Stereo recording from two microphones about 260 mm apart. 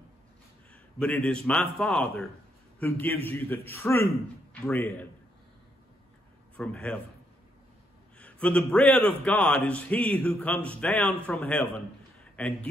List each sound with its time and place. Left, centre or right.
0.9 s a man's voice: centre
6.5 s a man's voice: centre
8.2 s a man's voice: centre